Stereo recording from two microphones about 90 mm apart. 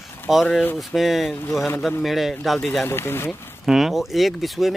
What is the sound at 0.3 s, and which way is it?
Speech, 5° right (ahead or behind).